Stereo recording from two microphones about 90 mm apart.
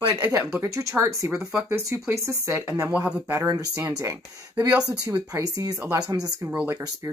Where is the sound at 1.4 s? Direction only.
5° right (ahead or behind).